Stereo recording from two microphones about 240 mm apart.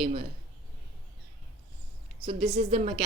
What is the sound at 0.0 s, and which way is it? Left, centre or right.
Speech, right.